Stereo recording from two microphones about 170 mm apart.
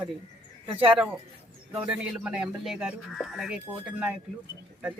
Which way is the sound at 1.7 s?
5° right (ahead or behind).